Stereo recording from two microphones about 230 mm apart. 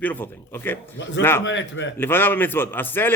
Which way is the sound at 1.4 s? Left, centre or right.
Left.